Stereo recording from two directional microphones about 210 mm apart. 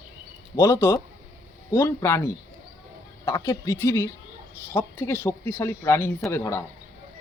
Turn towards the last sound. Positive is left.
turn(degrees=10)  # may be behind; listen again after turning